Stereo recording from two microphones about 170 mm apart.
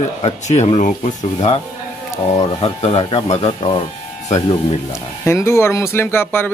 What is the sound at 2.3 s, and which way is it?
A man's voice, 30° left (ahead or behind).